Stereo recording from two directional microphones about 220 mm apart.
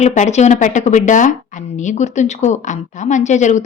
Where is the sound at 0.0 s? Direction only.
30° left (ahead or behind).